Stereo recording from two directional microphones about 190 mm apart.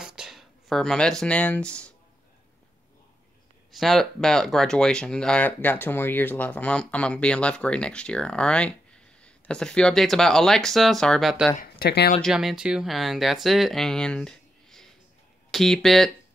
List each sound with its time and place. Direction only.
0.0 s speech: 5° right (ahead or behind)
3.7 s speech: centre (ahead or behind)
11.6 s speech: 55° left (ahead or behind)
12.2 s speech: centre (ahead or behind)